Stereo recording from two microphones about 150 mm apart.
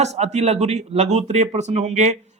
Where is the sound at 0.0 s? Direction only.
50° right (ahead or behind).